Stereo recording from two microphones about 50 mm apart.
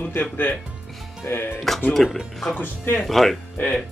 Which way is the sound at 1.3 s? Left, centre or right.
Left.